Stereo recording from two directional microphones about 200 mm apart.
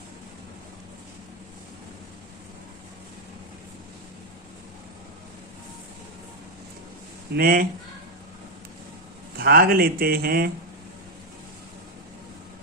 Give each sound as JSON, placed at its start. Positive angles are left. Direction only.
{"t": 7.3, "sound": "a man's voice", "side_deg": -45}
{"t": 9.4, "sound": "a man's voice", "side_deg": -50}